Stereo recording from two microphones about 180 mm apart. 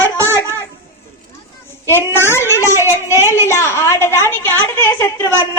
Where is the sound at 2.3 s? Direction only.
15° left (ahead or behind).